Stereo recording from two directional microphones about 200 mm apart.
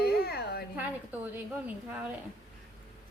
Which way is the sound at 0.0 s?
55° left (ahead or behind).